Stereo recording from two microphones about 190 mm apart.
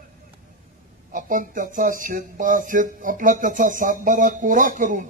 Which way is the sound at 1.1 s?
45° right (ahead or behind).